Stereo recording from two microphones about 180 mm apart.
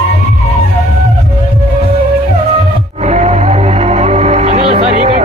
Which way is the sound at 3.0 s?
40° right (ahead or behind).